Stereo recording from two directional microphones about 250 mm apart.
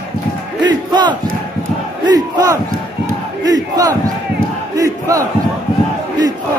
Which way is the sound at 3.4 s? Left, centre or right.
Centre.